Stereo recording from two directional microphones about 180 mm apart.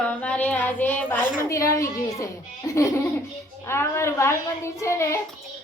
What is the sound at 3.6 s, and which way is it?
A woman's voice, 15° left (ahead or behind).